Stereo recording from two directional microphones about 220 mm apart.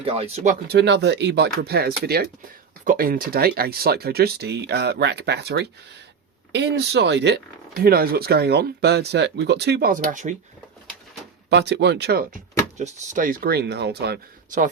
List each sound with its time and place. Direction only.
0.0 s speech: 25° right (ahead or behind)
0.7 s speech: 50° right (ahead or behind)
11.4 s speech: 50° right (ahead or behind)
12.7 s speech: 35° right (ahead or behind)